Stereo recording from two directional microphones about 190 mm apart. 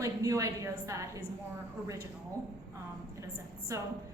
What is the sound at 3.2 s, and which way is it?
Speech, 15° right (ahead or behind).